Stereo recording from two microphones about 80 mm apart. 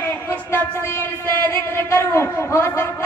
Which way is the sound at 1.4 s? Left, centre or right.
Left.